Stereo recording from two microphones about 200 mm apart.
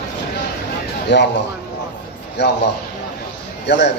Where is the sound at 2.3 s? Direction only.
60° left (ahead or behind).